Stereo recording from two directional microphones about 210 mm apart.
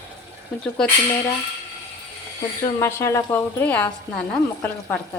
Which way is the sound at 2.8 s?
15° left (ahead or behind).